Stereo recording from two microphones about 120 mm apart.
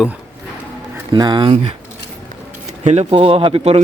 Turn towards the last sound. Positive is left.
turn(degrees=-55)  # may be behind; listen again after turning